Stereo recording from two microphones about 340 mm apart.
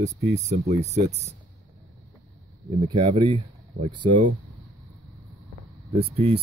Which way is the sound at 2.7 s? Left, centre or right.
Centre.